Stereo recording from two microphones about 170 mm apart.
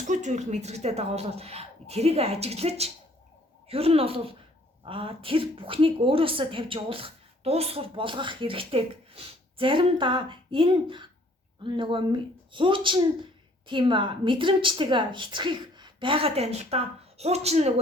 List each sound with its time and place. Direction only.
0.0 s a woman's voice: 45° right (ahead or behind)